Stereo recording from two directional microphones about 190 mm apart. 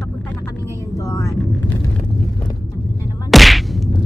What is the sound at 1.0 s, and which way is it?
Vehicle, 15° left (ahead or behind).